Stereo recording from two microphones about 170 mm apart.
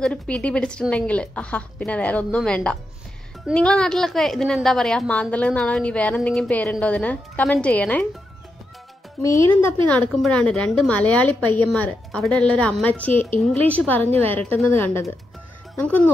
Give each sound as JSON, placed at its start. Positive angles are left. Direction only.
{"t": 0.0, "sound": "a woman's voice", "side_deg": 5}
{"t": 9.2, "sound": "a woman's voice", "side_deg": 15}
{"t": 9.8, "sound": "a woman's voice", "side_deg": 5}